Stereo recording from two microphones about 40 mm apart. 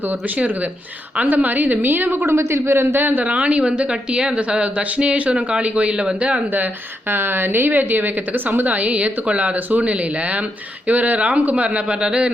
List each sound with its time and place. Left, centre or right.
1.2 s a woman's voice: right
3.0 s a woman's voice: right
3.2 s a woman's voice: right
7.1 s a woman's voice: right